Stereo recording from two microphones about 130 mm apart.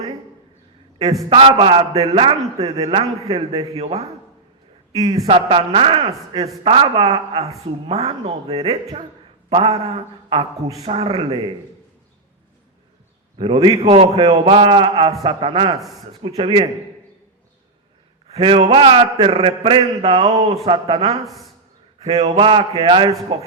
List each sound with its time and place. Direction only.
1.3 s a man's voice: 45° right (ahead or behind)
1.9 s a man's voice: 50° right (ahead or behind)
5.0 s a man's voice: 50° right (ahead or behind)
13.4 s a man's voice: 40° right (ahead or behind)
14.2 s a man's voice: 40° right (ahead or behind)
18.3 s a man's voice: 45° right (ahead or behind)
20.1 s a man's voice: 50° right (ahead or behind)